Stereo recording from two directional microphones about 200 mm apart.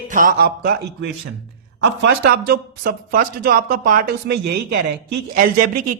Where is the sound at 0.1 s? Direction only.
45° right (ahead or behind).